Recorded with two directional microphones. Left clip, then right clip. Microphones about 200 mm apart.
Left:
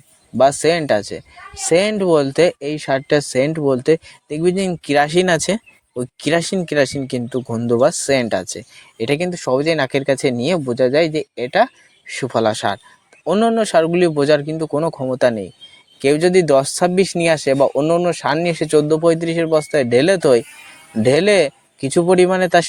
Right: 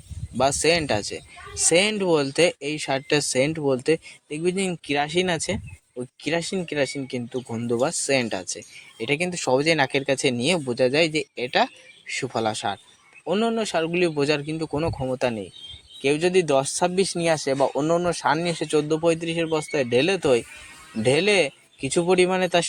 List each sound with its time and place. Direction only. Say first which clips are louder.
0.3 s speech: left 7 dB; 30° left (ahead or behind)